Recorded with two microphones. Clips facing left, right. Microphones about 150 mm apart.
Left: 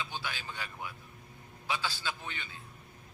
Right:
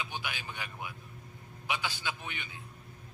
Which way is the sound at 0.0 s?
15° right (ahead or behind).